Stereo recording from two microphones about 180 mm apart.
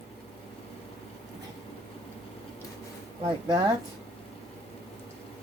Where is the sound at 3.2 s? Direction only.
25° right (ahead or behind).